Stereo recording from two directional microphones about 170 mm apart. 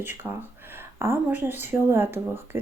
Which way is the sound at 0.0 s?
10° right (ahead or behind).